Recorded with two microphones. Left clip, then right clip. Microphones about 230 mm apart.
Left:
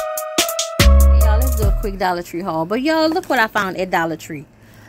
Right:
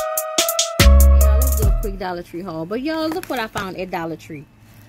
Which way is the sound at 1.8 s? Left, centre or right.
Centre.